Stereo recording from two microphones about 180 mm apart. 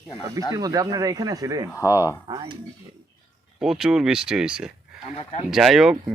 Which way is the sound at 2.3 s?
25° right (ahead or behind).